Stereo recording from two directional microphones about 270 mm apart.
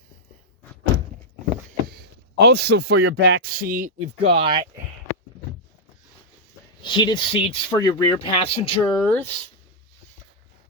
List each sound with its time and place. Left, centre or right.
1.6 s a sound: right
3.1 s speech: right
3.6 s speech: right
4.0 s speech: centre
6.8 s speech: centre
9.0 s speech: centre